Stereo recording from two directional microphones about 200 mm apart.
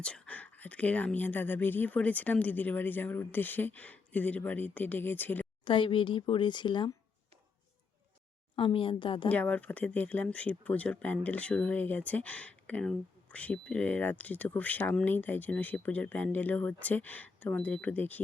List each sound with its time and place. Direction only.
0.0 s speech: 5° left (ahead or behind)
5.6 s a woman's voice: 25° left (ahead or behind)
8.5 s a woman's voice: 25° left (ahead or behind)
9.3 s speech: 10° left (ahead or behind)